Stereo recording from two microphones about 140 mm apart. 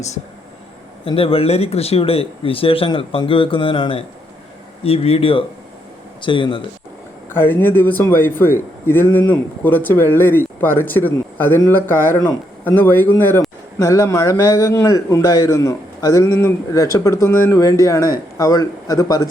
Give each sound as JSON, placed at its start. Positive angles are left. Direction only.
{"t": 1.0, "sound": "speech", "side_deg": 40}
{"t": 7.3, "sound": "a man's voice", "side_deg": 15}